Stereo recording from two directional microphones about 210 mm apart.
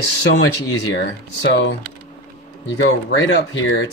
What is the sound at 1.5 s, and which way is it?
Speech, 55° left (ahead or behind).